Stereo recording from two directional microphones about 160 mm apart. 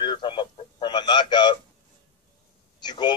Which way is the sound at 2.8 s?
30° left (ahead or behind).